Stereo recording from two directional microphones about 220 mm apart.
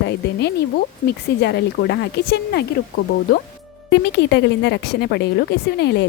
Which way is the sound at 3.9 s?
50° left (ahead or behind).